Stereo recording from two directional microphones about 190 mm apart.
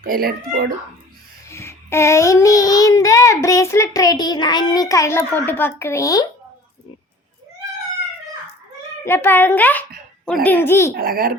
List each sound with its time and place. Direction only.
0.0 s a child's voice: 50° right (ahead or behind)
1.5 s child singing: 15° left (ahead or behind)
9.0 s child singing: 10° left (ahead or behind)
10.9 s a child's voice: 50° right (ahead or behind)